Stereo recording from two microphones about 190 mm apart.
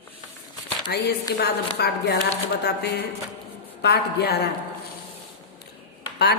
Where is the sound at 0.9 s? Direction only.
60° left (ahead or behind).